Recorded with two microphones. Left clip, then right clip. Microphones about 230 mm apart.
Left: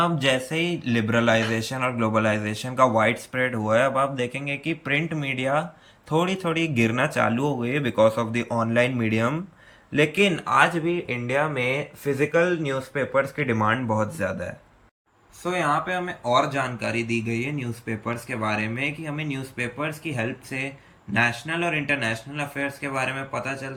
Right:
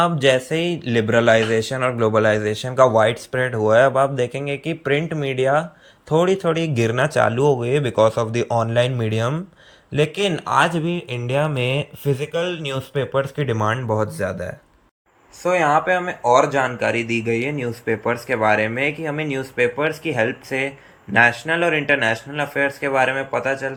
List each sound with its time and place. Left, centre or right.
0.0 s a man's voice: centre
15.4 s speech: centre